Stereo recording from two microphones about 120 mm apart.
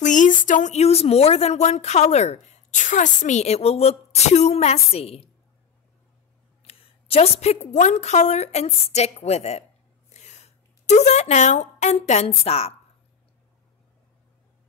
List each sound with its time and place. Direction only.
0.0 s speech: 90° left; by 5.3 s 55° left (ahead or behind)
6.6 s a sound: 60° left (ahead or behind)
7.7 s a woman's voice: 75° left (ahead or behind); by 12.7 s 60° left (ahead or behind)